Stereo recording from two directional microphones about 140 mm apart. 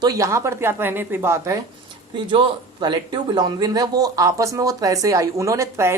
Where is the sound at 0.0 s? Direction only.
25° right (ahead or behind).